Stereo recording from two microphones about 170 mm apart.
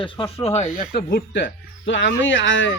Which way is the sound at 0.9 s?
65° left (ahead or behind).